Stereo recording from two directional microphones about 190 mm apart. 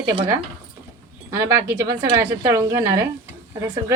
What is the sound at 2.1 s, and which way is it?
Speech, 15° right (ahead or behind).